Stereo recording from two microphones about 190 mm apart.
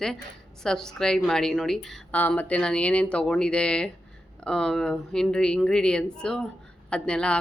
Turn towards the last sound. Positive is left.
turn(degrees=5)  # may be behind; listen again after turning